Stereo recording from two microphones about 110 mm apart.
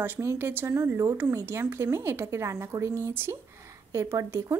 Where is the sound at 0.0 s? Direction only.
20° right (ahead or behind).